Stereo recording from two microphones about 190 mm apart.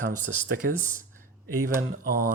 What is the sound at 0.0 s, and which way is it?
Speech, 45° right (ahead or behind).